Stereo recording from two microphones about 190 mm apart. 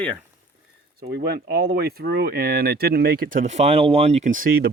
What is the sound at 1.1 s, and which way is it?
Speech, 60° right (ahead or behind).